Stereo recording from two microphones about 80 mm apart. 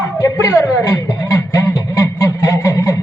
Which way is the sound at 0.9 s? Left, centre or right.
Left.